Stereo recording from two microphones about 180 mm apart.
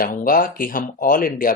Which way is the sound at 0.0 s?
50° left (ahead or behind).